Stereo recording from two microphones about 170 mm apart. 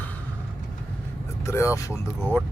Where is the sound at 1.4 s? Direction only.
15° left (ahead or behind).